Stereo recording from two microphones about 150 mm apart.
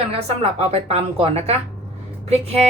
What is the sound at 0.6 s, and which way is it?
A woman's voice, 45° right (ahead or behind).